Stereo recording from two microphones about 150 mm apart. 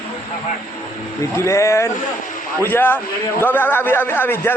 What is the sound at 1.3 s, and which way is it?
A man's voice, 20° left (ahead or behind).